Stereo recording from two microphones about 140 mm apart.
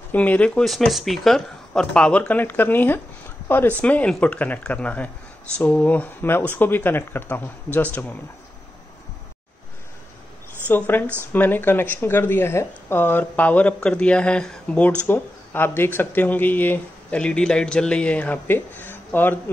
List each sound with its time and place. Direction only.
0.1 s speech: 10° left (ahead or behind)
10.7 s speech: 15° left (ahead or behind)